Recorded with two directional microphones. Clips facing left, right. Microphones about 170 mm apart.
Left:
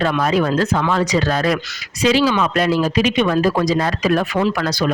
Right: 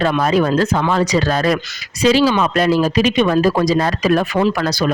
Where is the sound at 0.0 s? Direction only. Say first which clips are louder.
Right 2 dB; 35° right (ahead or behind).